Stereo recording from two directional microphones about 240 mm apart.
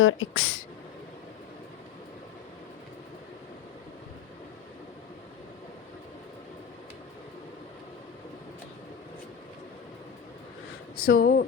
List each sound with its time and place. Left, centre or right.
0.0 s speech: left
11.0 s speech: left